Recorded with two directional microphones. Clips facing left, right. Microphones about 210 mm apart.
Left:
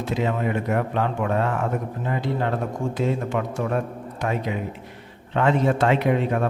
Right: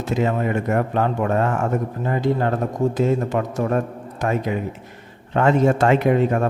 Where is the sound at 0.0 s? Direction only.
45° right (ahead or behind).